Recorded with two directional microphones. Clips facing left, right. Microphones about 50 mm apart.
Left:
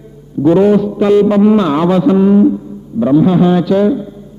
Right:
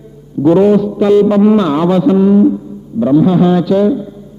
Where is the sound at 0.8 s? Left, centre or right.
Left.